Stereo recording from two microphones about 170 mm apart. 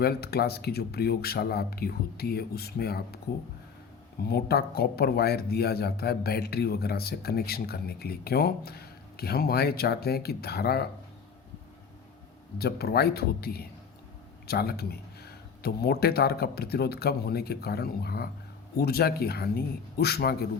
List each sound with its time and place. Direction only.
0.0 s speech: 70° left (ahead or behind)
4.2 s speech: 65° left (ahead or behind)
12.5 s speech: 65° left (ahead or behind)